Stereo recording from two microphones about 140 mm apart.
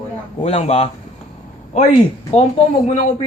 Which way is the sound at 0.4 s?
45° left (ahead or behind).